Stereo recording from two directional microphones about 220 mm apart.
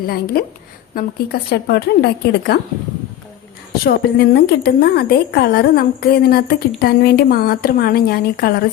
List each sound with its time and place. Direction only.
0.0 s a woman's voice: 45° left (ahead or behind)
3.8 s a woman's voice: 45° left (ahead or behind)